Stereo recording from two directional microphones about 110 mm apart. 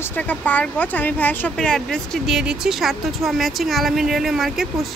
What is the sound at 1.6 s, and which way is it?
Speech, 5° left (ahead or behind).